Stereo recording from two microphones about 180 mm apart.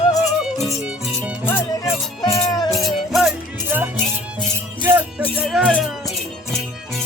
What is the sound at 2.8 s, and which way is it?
Music, centre (ahead or behind).